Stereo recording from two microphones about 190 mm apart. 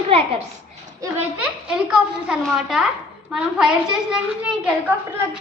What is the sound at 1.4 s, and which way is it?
A woman's voice, 5° right (ahead or behind).